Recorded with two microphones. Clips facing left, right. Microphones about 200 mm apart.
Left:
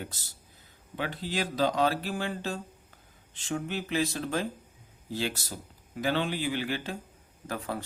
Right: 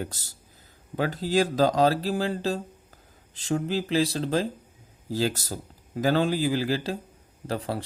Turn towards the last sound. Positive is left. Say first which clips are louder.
# right 5 dB
turn(degrees=-30)  # may be behind; listen again after turning